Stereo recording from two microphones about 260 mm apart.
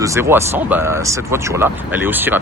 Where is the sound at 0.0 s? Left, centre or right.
Centre.